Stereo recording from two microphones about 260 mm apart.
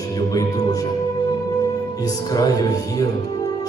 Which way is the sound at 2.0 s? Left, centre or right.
Centre.